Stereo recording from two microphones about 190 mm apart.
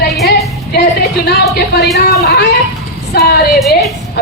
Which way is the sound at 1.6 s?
60° left (ahead or behind).